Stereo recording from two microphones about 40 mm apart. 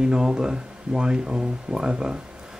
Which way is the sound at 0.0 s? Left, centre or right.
Centre.